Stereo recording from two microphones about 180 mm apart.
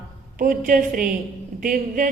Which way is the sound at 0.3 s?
50° right (ahead or behind).